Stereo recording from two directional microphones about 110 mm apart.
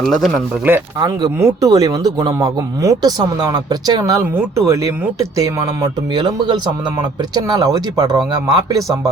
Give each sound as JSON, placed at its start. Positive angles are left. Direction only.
{"t": 0.0, "sound": "speech", "side_deg": 5}
{"t": 0.9, "sound": "speech", "side_deg": -35}